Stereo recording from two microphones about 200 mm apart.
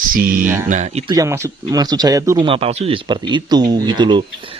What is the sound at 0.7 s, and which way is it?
Speech, 35° right (ahead or behind).